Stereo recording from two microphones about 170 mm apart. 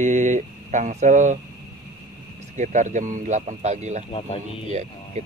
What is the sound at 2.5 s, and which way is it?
Speech, 45° right (ahead or behind).